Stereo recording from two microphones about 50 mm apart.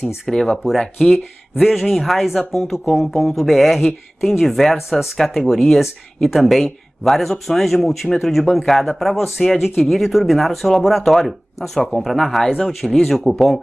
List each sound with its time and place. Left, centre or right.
0.0 s speech: centre